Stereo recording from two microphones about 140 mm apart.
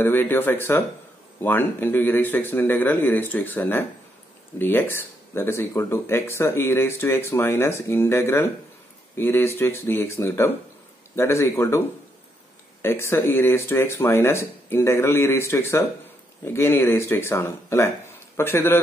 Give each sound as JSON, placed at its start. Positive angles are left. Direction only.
{"t": 0.0, "sound": "speech", "side_deg": 15}
{"t": 12.8, "sound": "speech", "side_deg": 15}